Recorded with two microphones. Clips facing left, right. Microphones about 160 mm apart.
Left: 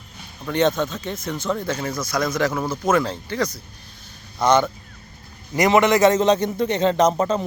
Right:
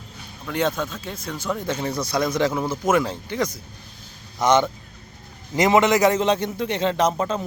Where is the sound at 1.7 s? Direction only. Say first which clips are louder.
Right 1 dB; 30° right (ahead or behind).